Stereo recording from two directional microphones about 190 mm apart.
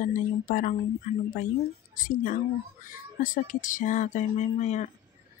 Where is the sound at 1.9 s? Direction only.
45° left (ahead or behind).